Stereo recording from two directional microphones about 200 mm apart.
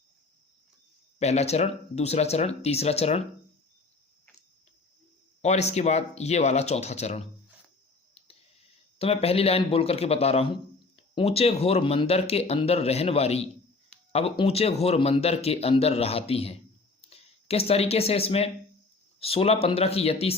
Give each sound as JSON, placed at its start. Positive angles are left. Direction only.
{"t": 1.2, "sound": "speech", "side_deg": 35}
{"t": 5.4, "sound": "speech", "side_deg": 35}
{"t": 9.0, "sound": "a man's voice", "side_deg": 30}